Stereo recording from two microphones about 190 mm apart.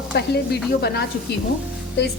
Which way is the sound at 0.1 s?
60° left (ahead or behind).